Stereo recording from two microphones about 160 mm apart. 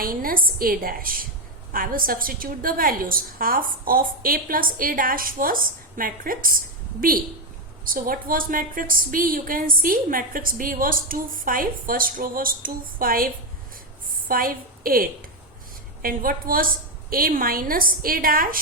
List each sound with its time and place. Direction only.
0.0 s a woman's voice: 65° right (ahead or behind)
7.9 s a woman's voice: 60° right (ahead or behind)